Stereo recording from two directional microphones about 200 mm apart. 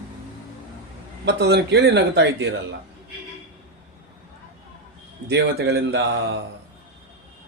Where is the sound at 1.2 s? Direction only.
55° right (ahead or behind).